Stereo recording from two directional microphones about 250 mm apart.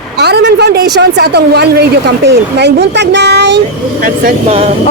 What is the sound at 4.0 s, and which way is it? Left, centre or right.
Speech, right.